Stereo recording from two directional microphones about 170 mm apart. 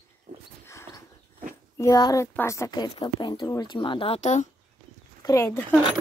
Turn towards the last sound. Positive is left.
turn(degrees=15)  # may be behind; listen again after turning